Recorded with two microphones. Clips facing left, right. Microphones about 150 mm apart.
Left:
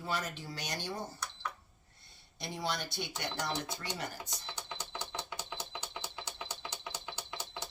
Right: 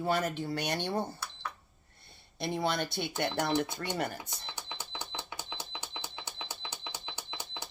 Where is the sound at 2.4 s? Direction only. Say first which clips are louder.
Right 6 dB; 55° right (ahead or behind).